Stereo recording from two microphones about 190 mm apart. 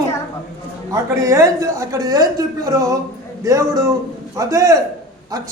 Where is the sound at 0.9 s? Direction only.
15° right (ahead or behind).